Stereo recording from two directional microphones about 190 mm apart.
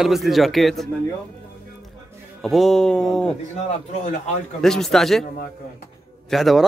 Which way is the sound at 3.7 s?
40° left (ahead or behind).